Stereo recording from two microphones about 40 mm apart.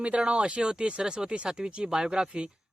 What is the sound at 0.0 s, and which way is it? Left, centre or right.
Speech, right.